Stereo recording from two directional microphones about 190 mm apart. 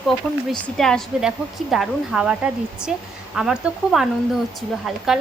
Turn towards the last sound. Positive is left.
turn(degrees=0)  # may be behind; listen again after turning